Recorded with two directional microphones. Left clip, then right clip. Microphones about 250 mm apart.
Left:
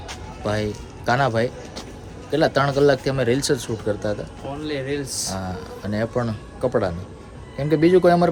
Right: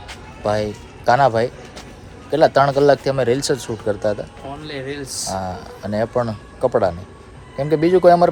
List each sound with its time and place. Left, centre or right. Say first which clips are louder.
0.4 s a man's voice: right 5 dB; centre
4.6 s speech: left 3 dB; centre